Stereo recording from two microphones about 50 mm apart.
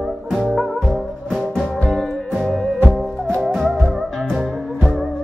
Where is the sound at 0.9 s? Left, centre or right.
Centre.